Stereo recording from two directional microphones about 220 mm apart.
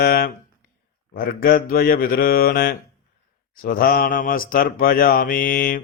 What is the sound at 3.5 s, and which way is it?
Speech, 40° left (ahead or behind).